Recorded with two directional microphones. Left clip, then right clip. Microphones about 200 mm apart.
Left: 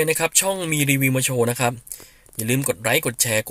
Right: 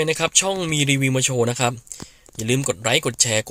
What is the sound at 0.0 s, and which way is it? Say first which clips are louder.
Speech: even; 5° right (ahead or behind).